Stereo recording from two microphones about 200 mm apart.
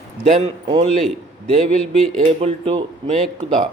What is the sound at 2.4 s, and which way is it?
Speech, 30° right (ahead or behind).